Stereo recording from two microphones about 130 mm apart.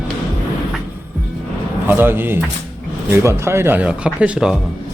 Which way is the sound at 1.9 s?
15° right (ahead or behind).